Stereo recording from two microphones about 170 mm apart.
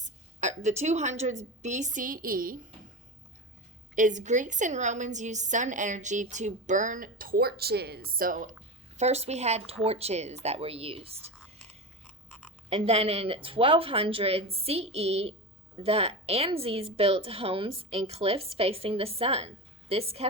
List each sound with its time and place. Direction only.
0.0 s a woman's voice: 45° right (ahead or behind)
3.9 s a woman's voice: 45° right (ahead or behind)
9.0 s speech: 40° right (ahead or behind)
12.3 s a sound: 5° left (ahead or behind)
12.7 s speech: 35° right (ahead or behind)